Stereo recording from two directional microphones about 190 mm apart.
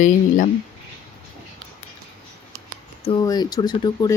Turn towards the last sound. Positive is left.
turn(degrees=20)  # may be behind; listen again after turning